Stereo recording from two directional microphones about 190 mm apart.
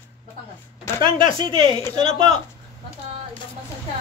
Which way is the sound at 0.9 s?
15° left (ahead or behind).